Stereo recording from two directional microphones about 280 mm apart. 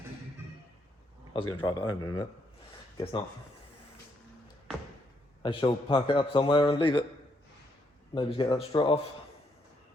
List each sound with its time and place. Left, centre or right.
1.3 s a man's voice: centre
5.4 s a man's voice: centre
8.1 s a man's voice: centre